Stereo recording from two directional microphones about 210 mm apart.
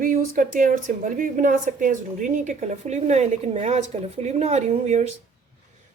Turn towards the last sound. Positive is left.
turn(degrees=-35)  # may be behind; listen again after turning